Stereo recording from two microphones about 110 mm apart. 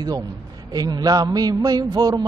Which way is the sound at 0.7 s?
35° right (ahead or behind).